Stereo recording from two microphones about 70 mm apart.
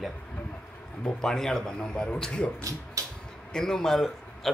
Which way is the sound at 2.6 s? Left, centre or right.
Right.